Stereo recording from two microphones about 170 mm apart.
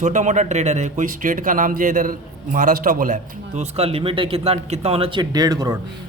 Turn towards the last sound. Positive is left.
turn(degrees=-25)  # may be behind; listen again after turning